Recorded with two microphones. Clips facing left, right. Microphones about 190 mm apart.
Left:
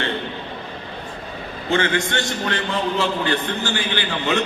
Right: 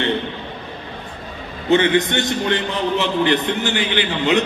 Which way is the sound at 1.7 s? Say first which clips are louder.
Right 5 dB; 20° right (ahead or behind).